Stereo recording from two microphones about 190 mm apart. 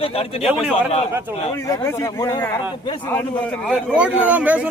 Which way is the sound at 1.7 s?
15° left (ahead or behind).